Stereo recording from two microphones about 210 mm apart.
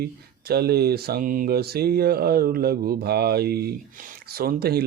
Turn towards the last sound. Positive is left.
turn(degrees=-45)  # may be behind; listen again after turning